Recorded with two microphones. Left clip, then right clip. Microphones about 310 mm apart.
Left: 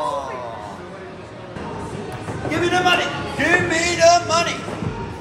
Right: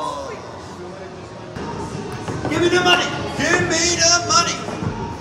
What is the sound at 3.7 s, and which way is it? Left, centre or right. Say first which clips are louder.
Music: left 3 dB; left.